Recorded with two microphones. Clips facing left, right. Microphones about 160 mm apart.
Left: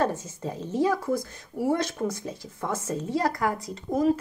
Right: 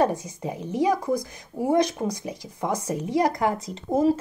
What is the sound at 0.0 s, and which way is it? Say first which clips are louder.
Speech: right 3 dB; 15° right (ahead or behind).